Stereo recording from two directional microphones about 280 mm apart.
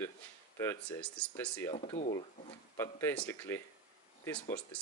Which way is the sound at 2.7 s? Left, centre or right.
Centre.